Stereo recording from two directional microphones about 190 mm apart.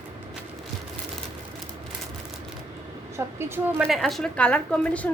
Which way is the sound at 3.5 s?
Centre (ahead or behind).